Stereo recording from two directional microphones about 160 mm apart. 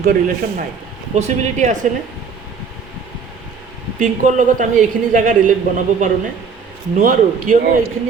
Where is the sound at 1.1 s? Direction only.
50° right (ahead or behind).